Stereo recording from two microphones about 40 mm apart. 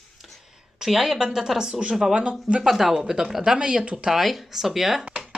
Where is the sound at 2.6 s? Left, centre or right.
Centre; by 4.1 s right.